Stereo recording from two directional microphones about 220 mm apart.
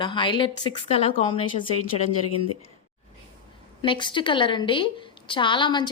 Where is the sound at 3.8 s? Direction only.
20° left (ahead or behind).